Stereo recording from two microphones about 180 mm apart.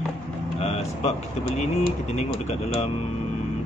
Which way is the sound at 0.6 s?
35° left (ahead or behind).